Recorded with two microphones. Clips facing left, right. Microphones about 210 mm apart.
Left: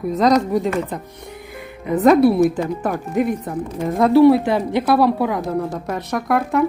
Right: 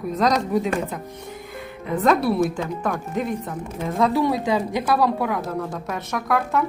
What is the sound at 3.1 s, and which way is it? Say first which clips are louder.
Speech: left 9 dB; 60° left (ahead or behind).